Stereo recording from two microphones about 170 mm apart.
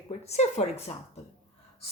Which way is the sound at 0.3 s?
40° left (ahead or behind).